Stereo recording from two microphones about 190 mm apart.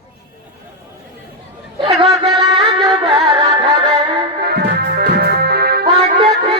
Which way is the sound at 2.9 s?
25° right (ahead or behind).